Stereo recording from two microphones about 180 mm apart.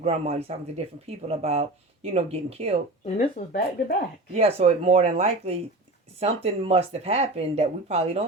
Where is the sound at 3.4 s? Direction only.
40° left (ahead or behind).